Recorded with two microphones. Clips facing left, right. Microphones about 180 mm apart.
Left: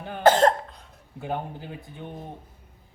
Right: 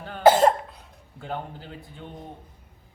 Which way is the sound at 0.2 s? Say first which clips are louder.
Right 1 dB; 10° right (ahead or behind).